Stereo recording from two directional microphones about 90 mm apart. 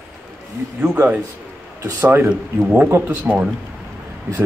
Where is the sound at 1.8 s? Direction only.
25° right (ahead or behind).